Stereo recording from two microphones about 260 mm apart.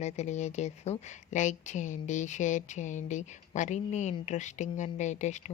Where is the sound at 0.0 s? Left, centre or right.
Left.